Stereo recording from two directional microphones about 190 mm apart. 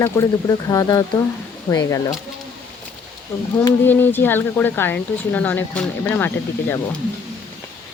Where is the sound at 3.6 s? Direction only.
10° left (ahead or behind).